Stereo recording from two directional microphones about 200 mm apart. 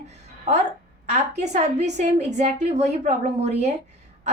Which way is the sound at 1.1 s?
35° right (ahead or behind).